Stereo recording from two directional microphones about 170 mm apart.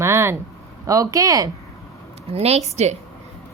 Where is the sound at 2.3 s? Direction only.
40° right (ahead or behind).